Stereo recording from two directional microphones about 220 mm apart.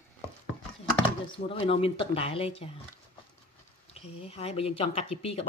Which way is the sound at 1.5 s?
25° left (ahead or behind).